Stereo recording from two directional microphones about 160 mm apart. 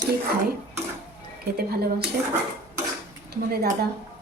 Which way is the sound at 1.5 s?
75° right (ahead or behind).